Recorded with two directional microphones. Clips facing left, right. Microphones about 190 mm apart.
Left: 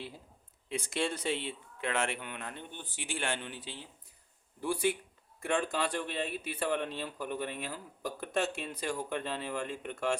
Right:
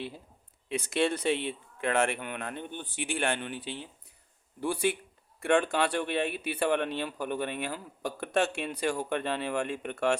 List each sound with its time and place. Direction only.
0.7 s speech: 65° right (ahead or behind)
4.6 s speech: 70° right (ahead or behind)